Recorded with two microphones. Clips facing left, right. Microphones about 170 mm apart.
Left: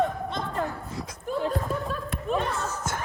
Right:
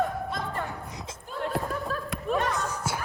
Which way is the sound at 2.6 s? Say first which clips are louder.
Even; 10° right (ahead or behind).